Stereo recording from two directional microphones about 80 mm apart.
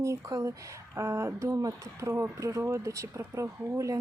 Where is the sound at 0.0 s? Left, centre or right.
Right.